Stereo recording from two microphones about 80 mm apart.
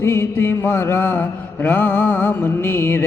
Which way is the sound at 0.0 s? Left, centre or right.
Left.